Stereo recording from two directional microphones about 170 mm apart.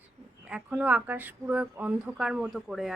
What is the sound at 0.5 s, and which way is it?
Speech, 10° right (ahead or behind).